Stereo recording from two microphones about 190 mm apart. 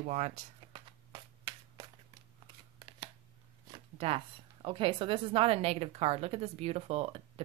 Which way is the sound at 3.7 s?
30° right (ahead or behind).